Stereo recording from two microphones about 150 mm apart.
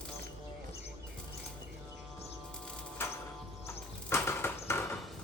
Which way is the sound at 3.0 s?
15° left (ahead or behind).